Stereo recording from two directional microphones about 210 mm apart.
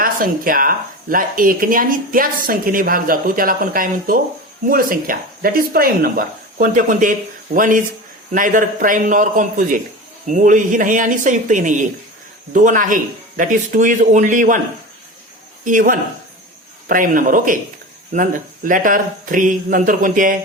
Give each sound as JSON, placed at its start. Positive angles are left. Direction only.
{"t": 0.0, "sound": "speech", "side_deg": -40}
{"t": 15.6, "sound": "speech", "side_deg": -40}